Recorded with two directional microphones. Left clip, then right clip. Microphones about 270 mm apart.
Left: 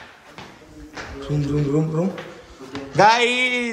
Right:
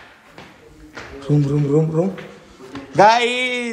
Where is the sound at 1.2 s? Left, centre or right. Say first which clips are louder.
Right 4 dB; centre.